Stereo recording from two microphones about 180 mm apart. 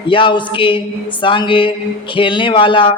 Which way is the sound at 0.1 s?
25° left (ahead or behind).